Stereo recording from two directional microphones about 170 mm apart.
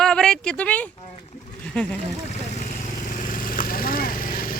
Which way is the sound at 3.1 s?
50° left (ahead or behind).